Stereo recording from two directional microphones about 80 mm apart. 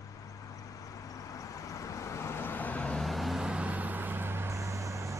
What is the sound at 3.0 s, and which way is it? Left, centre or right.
Vehicle, centre.